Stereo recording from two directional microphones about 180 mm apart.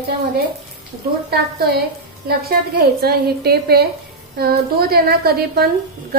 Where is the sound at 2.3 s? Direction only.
60° right (ahead or behind).